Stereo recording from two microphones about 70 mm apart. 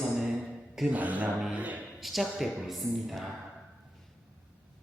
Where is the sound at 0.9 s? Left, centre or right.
Right.